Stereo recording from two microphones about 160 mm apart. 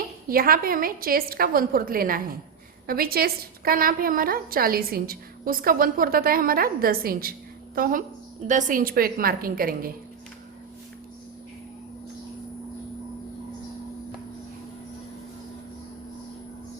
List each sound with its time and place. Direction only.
0.3 s a woman's voice: 65° right (ahead or behind)
7.8 s a woman's voice: 55° right (ahead or behind)